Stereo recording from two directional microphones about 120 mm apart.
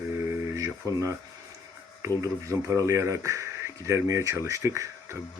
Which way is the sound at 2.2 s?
25° right (ahead or behind).